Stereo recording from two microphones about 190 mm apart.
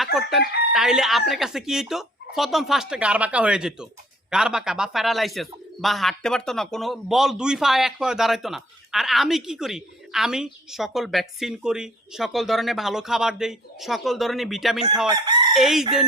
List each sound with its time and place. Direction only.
0.0 s chicken: centre (ahead or behind)
0.7 s a man's voice: 5° right (ahead or behind)
15.0 s chicken: 20° right (ahead or behind)
15.5 s a man's voice: centre (ahead or behind)